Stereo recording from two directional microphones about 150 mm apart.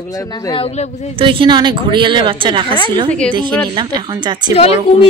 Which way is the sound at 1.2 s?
35° right (ahead or behind).